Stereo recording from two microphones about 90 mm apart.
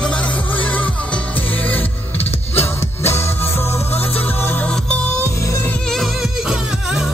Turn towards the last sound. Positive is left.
turn(degrees=-5)  # may be behind; listen again after turning